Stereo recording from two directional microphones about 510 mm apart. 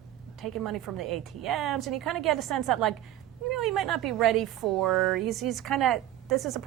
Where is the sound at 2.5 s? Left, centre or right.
Right.